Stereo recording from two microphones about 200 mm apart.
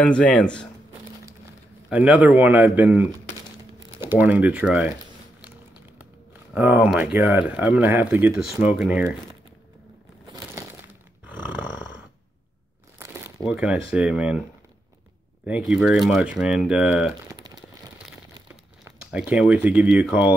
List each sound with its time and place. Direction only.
0.2 s speech: 5° left (ahead or behind)
1.9 s speech: 5° right (ahead or behind)
6.5 s speech: 5° right (ahead or behind)
10.3 s a sound: 10° right (ahead or behind)
13.0 s crumpling: 10° right (ahead or behind)
13.5 s speech: 5° right (ahead or behind)
15.4 s speech: 5° right (ahead or behind)
19.0 s speech: 5° right (ahead or behind)